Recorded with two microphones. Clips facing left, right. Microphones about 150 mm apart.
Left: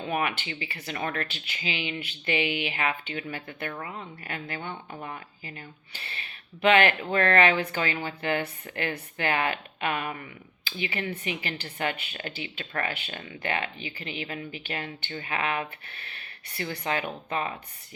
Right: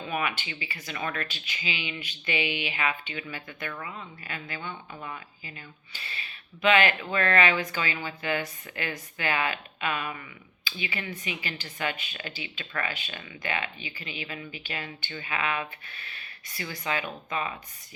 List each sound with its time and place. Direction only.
0.1 s speech: 50° left (ahead or behind)
3.7 s speech: 35° left (ahead or behind)
4.2 s speech: 55° left (ahead or behind)
4.9 s speech: 40° left (ahead or behind)
5.5 s speech: 55° left (ahead or behind)